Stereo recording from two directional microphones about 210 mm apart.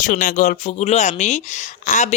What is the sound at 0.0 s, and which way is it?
Speech, 40° left (ahead or behind).